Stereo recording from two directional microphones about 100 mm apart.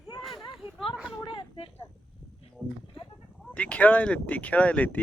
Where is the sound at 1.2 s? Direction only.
60° left (ahead or behind).